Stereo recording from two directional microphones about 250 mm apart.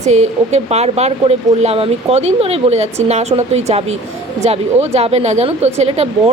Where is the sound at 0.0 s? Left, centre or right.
Right.